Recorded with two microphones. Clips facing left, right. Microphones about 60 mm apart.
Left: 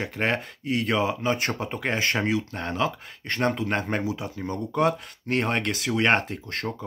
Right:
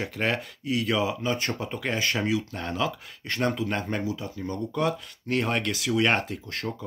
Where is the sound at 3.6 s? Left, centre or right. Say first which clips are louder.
Left 2 dB; left.